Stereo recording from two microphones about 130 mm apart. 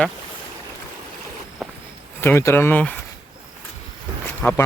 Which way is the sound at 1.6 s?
Centre (ahead or behind).